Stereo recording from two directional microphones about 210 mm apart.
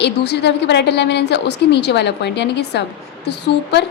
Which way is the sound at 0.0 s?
55° left (ahead or behind).